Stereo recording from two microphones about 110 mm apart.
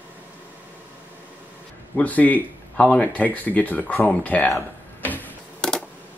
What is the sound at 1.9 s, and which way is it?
Speech, 15° left (ahead or behind).